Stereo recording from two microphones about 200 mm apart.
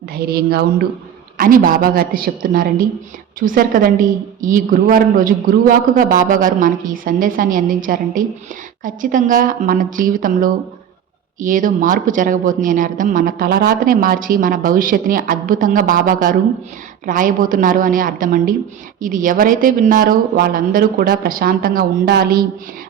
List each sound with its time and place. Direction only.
0.1 s speech: 50° right (ahead or behind)